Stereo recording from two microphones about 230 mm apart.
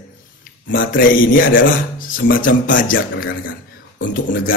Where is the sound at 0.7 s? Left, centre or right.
Left.